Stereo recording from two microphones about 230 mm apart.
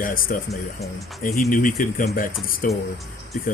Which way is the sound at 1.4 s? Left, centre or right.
Left.